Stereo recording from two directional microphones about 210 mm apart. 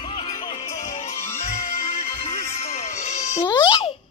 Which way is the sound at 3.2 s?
15° left (ahead or behind).